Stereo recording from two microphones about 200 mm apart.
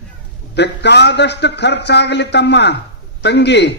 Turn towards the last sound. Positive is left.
turn(degrees=60)  # may be behind; listen again after turning